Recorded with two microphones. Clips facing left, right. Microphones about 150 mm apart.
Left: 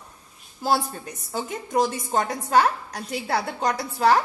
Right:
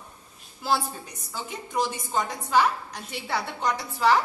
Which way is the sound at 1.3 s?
45° left (ahead or behind).